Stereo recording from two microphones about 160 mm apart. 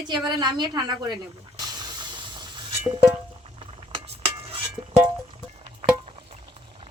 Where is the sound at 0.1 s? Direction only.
25° right (ahead or behind).